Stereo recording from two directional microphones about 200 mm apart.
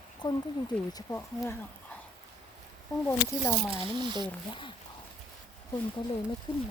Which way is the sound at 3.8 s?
20° right (ahead or behind).